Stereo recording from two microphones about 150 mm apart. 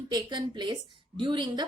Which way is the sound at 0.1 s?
30° right (ahead or behind).